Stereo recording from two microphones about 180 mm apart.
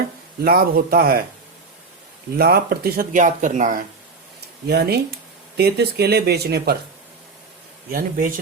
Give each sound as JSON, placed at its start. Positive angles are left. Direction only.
{"t": 0.4, "sound": "speech", "side_deg": -55}
{"t": 2.4, "sound": "speech", "side_deg": -60}
{"t": 4.6, "sound": "speech", "side_deg": -60}
{"t": 7.9, "sound": "speech", "side_deg": -55}